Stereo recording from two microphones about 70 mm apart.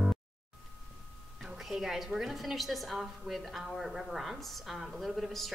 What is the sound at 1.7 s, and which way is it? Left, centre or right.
A woman's voice, centre.